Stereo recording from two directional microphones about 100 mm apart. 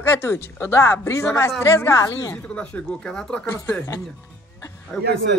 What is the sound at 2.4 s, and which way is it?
Speech, 15° left (ahead or behind).